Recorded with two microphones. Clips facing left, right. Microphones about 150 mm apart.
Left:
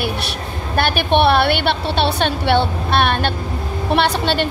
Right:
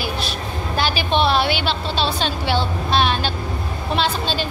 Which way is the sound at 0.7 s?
60° left (ahead or behind).